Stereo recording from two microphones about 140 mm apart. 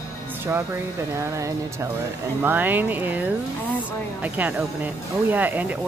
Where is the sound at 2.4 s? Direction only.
15° right (ahead or behind).